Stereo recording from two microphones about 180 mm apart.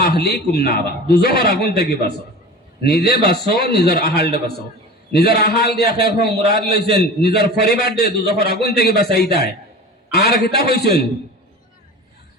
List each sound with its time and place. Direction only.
0.0 s a man's voice: 65° left (ahead or behind)